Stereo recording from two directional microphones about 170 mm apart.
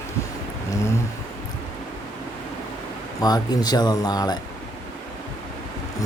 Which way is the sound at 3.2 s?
20° left (ahead or behind).